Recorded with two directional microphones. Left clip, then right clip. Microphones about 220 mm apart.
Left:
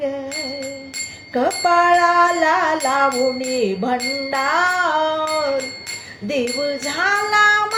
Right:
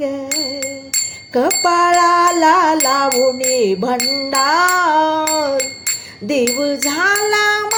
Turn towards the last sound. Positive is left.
turn(degrees=-50)  # may be behind; listen again after turning